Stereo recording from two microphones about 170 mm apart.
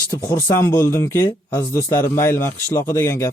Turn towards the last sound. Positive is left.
turn(degrees=15)  # may be behind; listen again after turning